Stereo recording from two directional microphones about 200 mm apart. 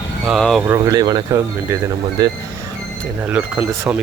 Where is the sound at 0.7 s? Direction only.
20° right (ahead or behind).